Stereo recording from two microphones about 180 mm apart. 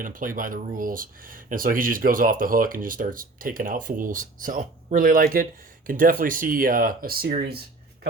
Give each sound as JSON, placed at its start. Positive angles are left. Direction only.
{"t": 0.0, "sound": "speech", "side_deg": -50}